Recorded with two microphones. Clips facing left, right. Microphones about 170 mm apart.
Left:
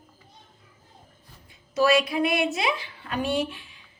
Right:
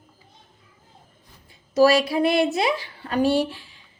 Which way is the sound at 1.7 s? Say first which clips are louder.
Right 4 dB; 35° right (ahead or behind).